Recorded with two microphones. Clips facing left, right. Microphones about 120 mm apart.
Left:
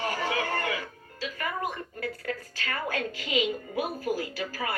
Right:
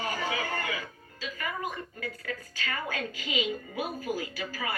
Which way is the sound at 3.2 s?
50° left (ahead or behind).